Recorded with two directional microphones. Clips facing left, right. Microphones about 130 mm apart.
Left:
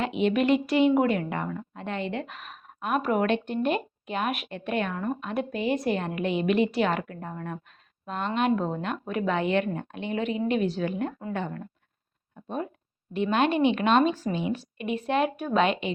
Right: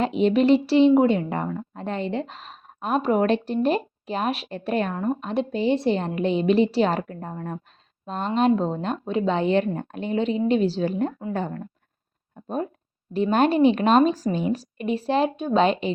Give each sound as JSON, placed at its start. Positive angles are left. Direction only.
{"t": 0.0, "sound": "a woman's voice", "side_deg": -35}
{"t": 13.1, "sound": "a woman's voice", "side_deg": -40}